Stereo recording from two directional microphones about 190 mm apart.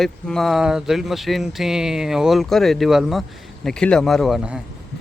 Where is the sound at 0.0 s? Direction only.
Centre (ahead or behind).